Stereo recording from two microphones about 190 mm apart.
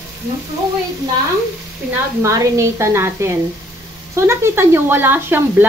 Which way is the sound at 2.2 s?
15° right (ahead or behind).